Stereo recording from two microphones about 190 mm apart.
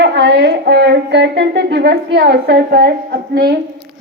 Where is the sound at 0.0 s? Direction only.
65° right (ahead or behind).